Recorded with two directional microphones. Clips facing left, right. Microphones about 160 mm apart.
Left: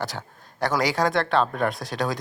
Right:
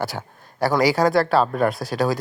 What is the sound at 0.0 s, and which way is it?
Speech, 10° right (ahead or behind).